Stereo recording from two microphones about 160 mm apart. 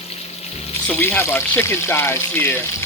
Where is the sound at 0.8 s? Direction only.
10° left (ahead or behind).